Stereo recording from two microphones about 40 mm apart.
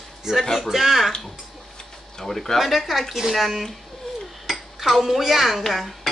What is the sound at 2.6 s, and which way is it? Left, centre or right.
Speech, centre.